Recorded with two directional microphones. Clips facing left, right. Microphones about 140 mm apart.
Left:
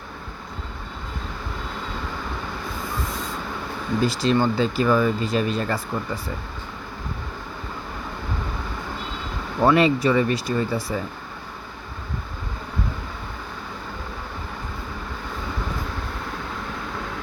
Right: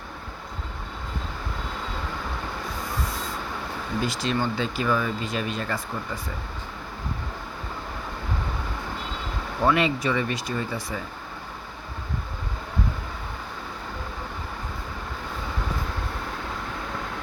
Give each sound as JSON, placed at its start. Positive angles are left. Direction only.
{"t": 4.0, "sound": "speech", "side_deg": 35}
{"t": 9.6, "sound": "speech", "side_deg": 35}